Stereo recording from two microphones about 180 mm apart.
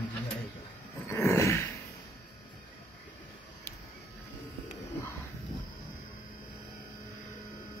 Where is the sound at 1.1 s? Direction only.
15° left (ahead or behind).